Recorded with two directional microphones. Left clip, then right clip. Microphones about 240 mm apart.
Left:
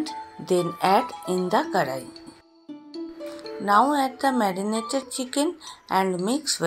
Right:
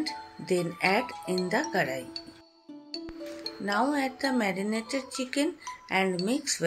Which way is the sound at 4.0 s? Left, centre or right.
Centre.